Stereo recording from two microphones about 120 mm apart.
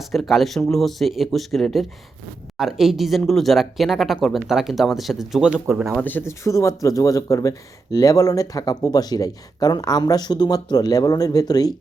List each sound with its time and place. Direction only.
0.0 s speech: centre (ahead or behind)
6.0 s speech: 15° left (ahead or behind); by 11.7 s 35° left (ahead or behind)